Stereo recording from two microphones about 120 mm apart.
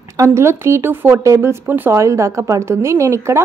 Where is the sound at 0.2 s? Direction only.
20° right (ahead or behind).